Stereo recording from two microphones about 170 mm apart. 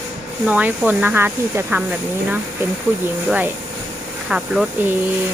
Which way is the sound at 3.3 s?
10° right (ahead or behind).